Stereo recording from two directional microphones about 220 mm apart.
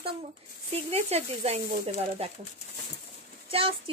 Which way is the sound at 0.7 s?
30° right (ahead or behind).